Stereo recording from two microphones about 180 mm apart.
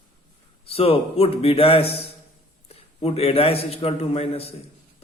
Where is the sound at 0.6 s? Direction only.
30° left (ahead or behind).